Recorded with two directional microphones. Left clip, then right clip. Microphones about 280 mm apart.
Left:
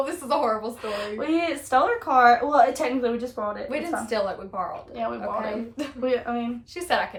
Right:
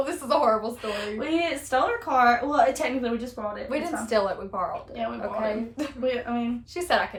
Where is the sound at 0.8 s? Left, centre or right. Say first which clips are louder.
Left 1 dB; centre.